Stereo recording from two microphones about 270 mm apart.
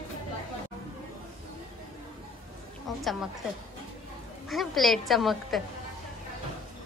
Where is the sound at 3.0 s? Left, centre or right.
Centre.